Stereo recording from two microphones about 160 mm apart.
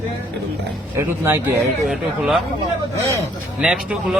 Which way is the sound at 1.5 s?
Centre (ahead or behind).